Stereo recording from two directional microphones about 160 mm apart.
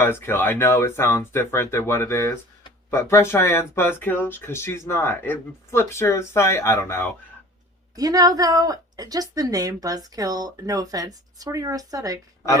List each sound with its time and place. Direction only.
0.0 s speech: 15° left (ahead or behind)
7.9 s a woman's voice: 20° right (ahead or behind)